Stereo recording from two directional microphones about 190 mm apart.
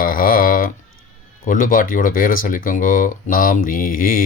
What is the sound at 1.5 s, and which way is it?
Speech, 45° left (ahead or behind).